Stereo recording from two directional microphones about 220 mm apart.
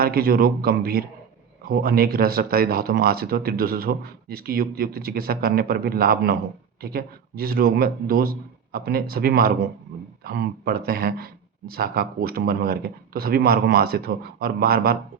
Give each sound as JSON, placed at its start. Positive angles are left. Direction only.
{"t": 0.0, "sound": "speech", "side_deg": -45}